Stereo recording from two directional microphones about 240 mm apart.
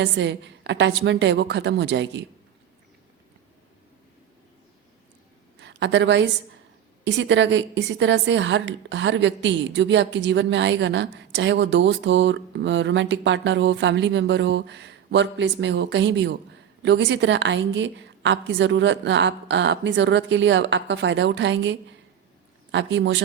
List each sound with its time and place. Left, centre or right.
0.0 s a woman's voice: right
5.5 s a woman's voice: right